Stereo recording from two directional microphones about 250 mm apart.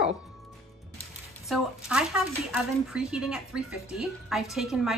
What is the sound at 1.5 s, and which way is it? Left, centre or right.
Speech, centre.